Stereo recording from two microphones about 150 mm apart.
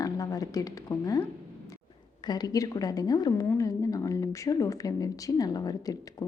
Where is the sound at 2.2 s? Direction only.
25° left (ahead or behind).